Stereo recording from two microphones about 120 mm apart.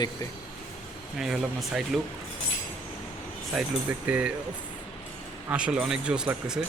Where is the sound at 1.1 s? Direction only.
5° right (ahead or behind).